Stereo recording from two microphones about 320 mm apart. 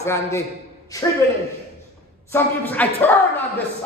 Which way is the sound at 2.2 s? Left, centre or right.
Centre.